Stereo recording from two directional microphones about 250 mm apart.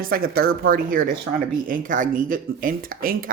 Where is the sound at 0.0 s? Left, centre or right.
Right.